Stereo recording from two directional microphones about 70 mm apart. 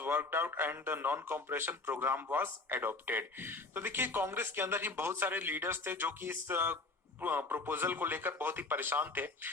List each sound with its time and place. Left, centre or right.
0.0 s a man's voice: right